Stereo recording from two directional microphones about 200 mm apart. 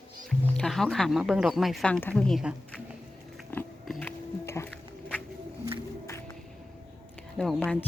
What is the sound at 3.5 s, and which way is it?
Biting, 10° left (ahead or behind).